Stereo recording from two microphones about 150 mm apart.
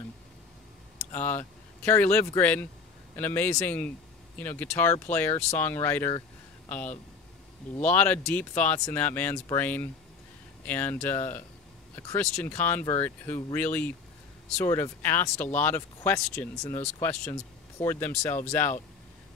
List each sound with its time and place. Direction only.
1.1 s speech: 10° left (ahead or behind)